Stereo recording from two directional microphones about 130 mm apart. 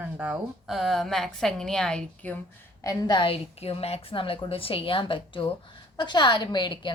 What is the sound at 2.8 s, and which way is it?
A woman's voice, 25° left (ahead or behind).